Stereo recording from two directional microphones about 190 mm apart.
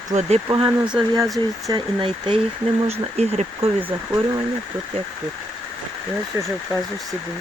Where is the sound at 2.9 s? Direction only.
35° right (ahead or behind).